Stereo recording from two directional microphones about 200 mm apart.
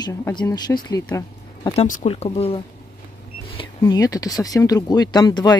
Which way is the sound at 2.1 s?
30° left (ahead or behind).